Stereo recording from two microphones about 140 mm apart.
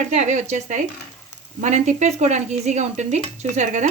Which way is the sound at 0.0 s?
55° right (ahead or behind).